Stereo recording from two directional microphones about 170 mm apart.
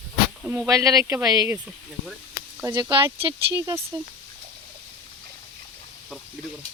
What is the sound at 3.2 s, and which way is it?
Speech, 25° right (ahead or behind).